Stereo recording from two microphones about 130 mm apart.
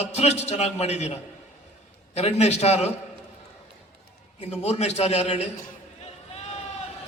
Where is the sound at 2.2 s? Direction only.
55° left (ahead or behind).